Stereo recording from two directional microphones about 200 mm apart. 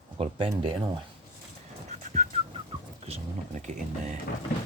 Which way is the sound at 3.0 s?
35° right (ahead or behind).